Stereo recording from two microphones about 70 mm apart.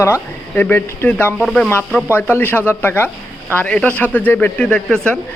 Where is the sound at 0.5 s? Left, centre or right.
Left.